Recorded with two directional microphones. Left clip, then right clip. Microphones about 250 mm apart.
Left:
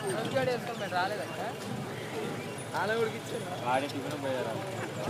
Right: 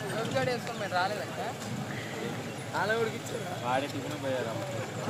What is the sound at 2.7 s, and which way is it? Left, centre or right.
Speech, right.